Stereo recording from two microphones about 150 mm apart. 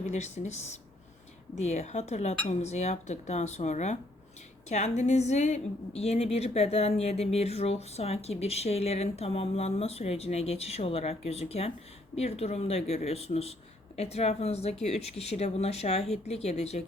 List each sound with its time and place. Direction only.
0.0 s a woman's voice: 50° left (ahead or behind)